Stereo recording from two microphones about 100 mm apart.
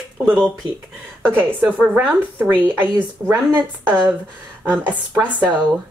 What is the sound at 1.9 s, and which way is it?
A woman's voice, 15° right (ahead or behind).